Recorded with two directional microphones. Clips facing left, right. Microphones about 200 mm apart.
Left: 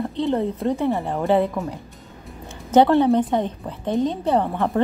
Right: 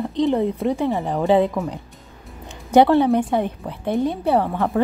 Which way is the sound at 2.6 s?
15° right (ahead or behind).